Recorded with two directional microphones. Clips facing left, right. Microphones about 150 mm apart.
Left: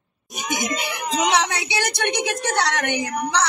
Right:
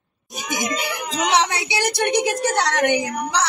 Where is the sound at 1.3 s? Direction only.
30° right (ahead or behind).